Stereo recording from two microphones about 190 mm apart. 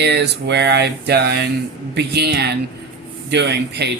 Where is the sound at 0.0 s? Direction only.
65° right (ahead or behind).